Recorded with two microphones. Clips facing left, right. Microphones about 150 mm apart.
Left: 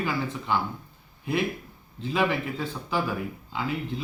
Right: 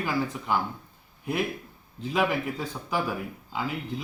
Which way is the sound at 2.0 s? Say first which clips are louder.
Even; centre (ahead or behind).